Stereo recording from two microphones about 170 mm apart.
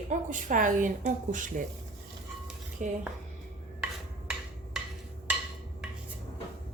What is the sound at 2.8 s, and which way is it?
Speech, 50° right (ahead or behind).